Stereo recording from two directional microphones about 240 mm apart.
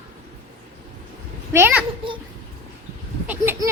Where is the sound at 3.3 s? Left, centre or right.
Centre.